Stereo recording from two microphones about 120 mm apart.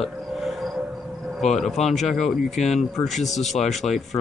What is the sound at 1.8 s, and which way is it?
Speech, 70° left (ahead or behind).